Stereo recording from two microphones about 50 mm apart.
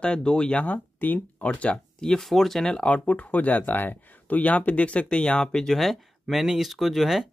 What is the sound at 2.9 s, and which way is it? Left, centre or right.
Speech, left.